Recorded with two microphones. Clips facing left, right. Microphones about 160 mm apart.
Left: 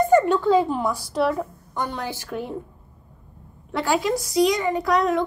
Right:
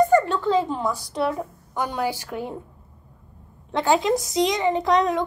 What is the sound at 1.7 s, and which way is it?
Speech, 10° right (ahead or behind).